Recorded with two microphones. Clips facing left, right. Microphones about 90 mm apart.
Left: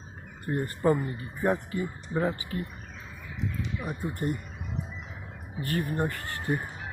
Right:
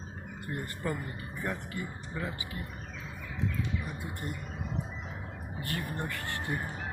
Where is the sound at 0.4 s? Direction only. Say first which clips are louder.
Left 10 dB; 40° left (ahead or behind).